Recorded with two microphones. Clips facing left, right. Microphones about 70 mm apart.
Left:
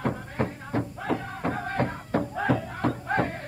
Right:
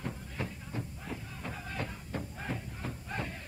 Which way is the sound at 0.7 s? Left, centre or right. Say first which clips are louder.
Left 13 dB; left.